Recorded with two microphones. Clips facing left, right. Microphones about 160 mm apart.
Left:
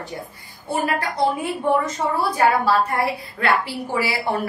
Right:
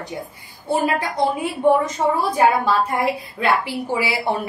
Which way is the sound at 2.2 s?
20° right (ahead or behind).